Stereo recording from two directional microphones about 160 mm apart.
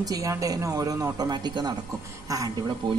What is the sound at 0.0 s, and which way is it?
Speech, 20° right (ahead or behind).